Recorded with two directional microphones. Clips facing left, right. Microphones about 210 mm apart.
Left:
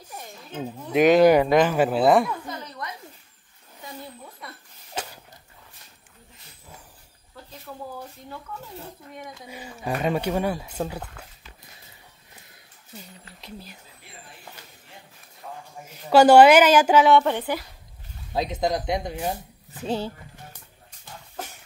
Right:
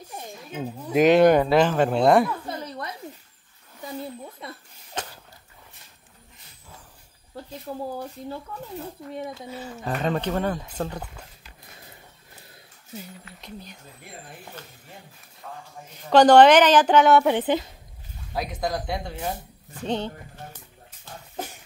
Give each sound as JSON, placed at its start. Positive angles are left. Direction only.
{"t": 0.5, "sound": "speech", "side_deg": -10}
{"t": 2.4, "sound": "a sound", "side_deg": -30}
{"t": 4.4, "sound": "a sound", "side_deg": -25}
{"t": 4.9, "sound": "a sound", "side_deg": 10}
{"t": 7.7, "sound": "speech", "side_deg": -35}
{"t": 9.1, "sound": "speech", "side_deg": -30}
{"t": 9.5, "sound": "speech", "side_deg": 10}
{"t": 13.4, "sound": "speech", "side_deg": 5}
{"t": 15.4, "sound": "speech", "side_deg": 15}
{"t": 17.2, "sound": "speech", "side_deg": -15}
{"t": 18.3, "sound": "speech", "side_deg": 25}
{"t": 19.7, "sound": "speech", "side_deg": 5}